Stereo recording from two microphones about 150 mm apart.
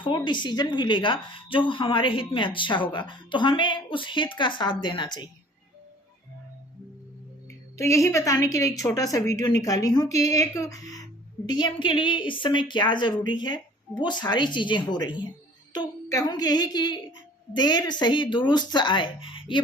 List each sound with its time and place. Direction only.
0.0 s speech: 30° left (ahead or behind)
7.8 s a woman's voice: 20° left (ahead or behind)